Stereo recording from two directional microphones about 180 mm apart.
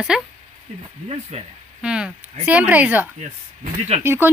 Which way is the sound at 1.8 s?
5° right (ahead or behind).